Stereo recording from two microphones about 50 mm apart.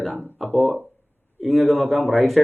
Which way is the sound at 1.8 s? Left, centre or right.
Left.